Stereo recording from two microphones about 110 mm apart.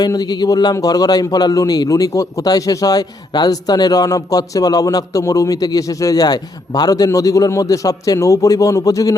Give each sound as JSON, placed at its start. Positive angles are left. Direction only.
{"t": 0.0, "sound": "speech", "side_deg": 40}